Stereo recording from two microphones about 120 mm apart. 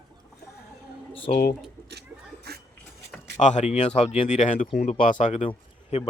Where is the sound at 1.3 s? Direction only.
90° left.